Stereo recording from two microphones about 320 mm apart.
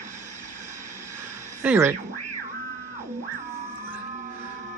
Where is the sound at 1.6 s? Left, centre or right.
Centre.